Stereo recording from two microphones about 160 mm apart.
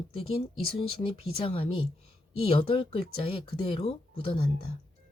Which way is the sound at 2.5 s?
35° left (ahead or behind).